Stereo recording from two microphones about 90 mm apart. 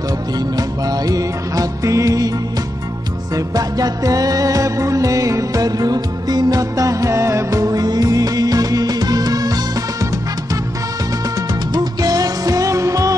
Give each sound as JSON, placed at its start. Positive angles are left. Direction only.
{"t": 0.6, "sound": "music", "side_deg": -45}
{"t": 3.3, "sound": "music", "side_deg": -45}
{"t": 11.7, "sound": "music", "side_deg": -45}